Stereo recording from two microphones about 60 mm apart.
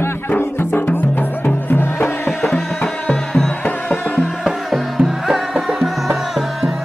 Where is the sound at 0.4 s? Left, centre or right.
Left.